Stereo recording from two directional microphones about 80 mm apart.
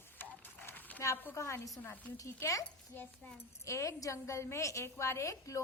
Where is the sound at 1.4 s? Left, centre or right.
Left.